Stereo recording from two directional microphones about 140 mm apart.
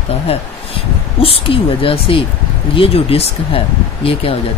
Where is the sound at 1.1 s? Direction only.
40° left (ahead or behind).